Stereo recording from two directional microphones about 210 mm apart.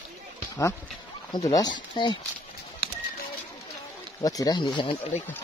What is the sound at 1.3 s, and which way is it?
Speech, 20° left (ahead or behind).